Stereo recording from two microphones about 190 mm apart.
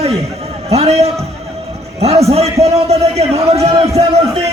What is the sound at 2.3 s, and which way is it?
A man's voice, 35° right (ahead or behind).